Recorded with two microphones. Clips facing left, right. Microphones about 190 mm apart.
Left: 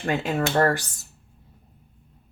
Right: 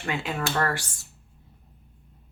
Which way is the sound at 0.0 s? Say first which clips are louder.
Left 5 dB; 40° left (ahead or behind).